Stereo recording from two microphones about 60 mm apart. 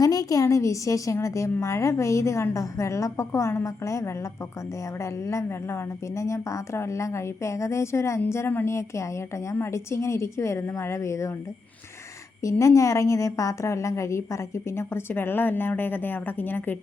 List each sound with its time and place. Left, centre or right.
0.0 s a sound: left
0.4 s a woman's voice: left
5.2 s a woman's voice: left
12.4 s a woman's voice: left
15.1 s a woman's voice: left